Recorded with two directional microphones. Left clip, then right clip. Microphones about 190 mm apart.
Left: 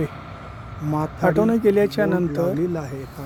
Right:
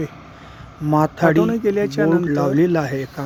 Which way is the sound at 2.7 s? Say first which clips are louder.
Right 9 dB; 35° right (ahead or behind).